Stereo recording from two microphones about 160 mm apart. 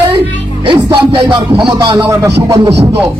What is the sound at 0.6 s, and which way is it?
A man's voice, 35° right (ahead or behind).